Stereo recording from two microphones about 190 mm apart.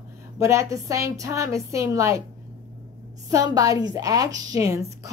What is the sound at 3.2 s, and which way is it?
A woman's voice, 15° right (ahead or behind).